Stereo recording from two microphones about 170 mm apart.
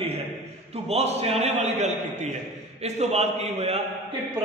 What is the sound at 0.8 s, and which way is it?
A man's voice, 35° right (ahead or behind).